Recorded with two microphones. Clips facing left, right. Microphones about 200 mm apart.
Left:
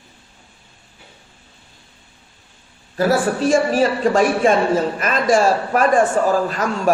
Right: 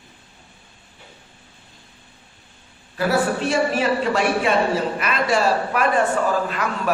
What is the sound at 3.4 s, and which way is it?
A woman's voice, 40° left (ahead or behind).